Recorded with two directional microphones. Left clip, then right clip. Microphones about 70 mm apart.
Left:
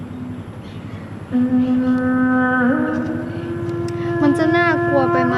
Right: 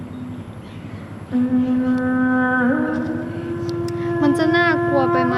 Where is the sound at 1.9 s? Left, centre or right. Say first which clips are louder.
Left 1 dB; centre.